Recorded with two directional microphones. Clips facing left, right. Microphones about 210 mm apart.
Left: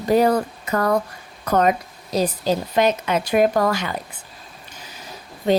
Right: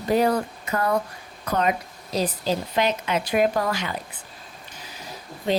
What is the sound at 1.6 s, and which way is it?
A woman's voice, 45° left (ahead or behind).